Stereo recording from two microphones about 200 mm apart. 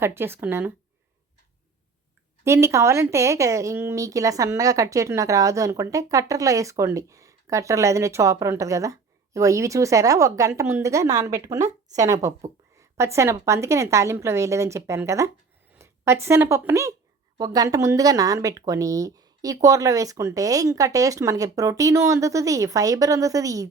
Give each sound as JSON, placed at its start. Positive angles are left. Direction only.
{"t": 0.0, "sound": "a woman's voice", "side_deg": -10}
{"t": 2.4, "sound": "a woman's voice", "side_deg": -15}